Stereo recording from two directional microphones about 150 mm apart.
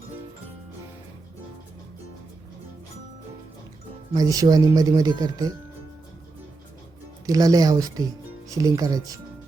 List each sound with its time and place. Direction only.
4.1 s speech: 25° right (ahead or behind)
7.3 s speech: 25° right (ahead or behind)